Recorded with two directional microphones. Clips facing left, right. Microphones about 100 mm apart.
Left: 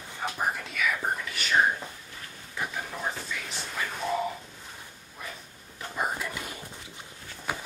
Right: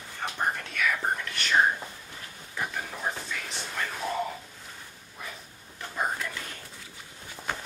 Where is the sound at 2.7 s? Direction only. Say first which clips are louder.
Even; centre (ahead or behind).